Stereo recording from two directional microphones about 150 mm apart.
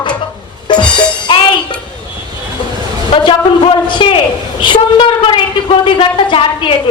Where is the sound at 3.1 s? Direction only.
35° left (ahead or behind).